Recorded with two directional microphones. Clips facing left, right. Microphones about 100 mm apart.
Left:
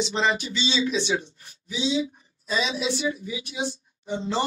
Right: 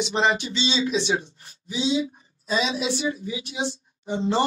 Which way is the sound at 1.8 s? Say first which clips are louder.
Right 2 dB; 40° right (ahead or behind).